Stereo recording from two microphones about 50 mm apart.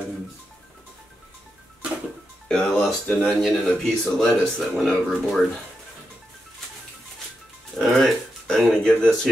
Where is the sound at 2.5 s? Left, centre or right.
Centre.